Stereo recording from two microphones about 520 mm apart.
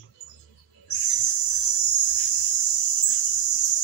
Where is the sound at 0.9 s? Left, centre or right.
Left.